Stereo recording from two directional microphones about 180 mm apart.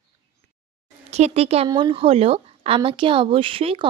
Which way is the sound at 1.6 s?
25° right (ahead or behind).